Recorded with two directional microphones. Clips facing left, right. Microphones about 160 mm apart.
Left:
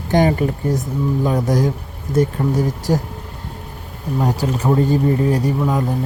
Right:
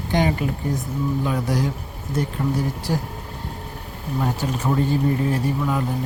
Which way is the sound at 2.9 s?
45° left (ahead or behind).